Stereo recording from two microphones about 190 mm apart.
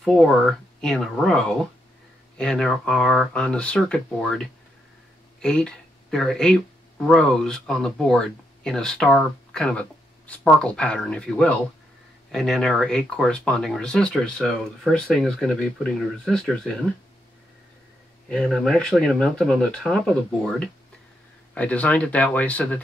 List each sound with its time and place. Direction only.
0.0 s speech: centre (ahead or behind)
18.3 s speech: centre (ahead or behind)